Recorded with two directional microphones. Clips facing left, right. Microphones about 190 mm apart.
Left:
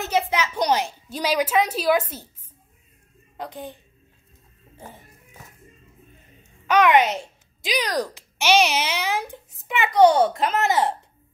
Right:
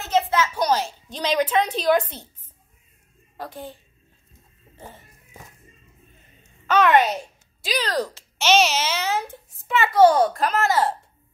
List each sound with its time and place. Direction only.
0.0 s a child's voice: 15° left (ahead or behind)
3.3 s a child's voice: 20° left (ahead or behind)
4.7 s cat: 10° left (ahead or behind)
6.7 s a child's voice: 15° left (ahead or behind)